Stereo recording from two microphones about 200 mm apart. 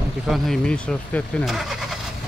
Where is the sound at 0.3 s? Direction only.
5° left (ahead or behind).